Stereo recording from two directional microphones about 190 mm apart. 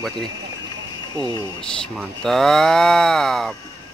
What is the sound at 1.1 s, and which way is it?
Speech, 20° right (ahead or behind).